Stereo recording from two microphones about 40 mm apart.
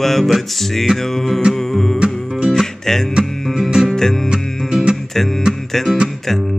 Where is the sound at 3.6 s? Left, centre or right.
Centre.